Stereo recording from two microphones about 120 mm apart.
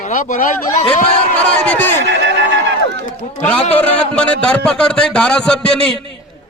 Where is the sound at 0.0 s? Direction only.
90° left.